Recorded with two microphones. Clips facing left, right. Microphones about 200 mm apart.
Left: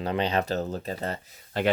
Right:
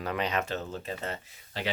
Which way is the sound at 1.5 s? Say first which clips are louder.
Left 9 dB; 50° left (ahead or behind).